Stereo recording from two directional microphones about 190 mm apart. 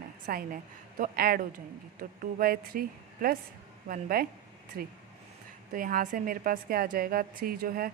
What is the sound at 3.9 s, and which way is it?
A woman's voice, 50° right (ahead or behind).